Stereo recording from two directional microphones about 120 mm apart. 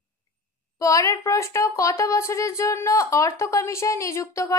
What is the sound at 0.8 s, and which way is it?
Speech, 25° left (ahead or behind).